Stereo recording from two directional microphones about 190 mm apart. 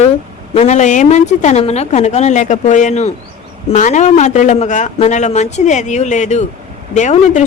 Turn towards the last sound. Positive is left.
turn(degrees=40)  # may be behind; listen again after turning